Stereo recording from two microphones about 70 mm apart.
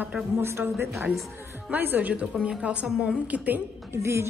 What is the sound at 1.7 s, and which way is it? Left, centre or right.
A man's voice, right.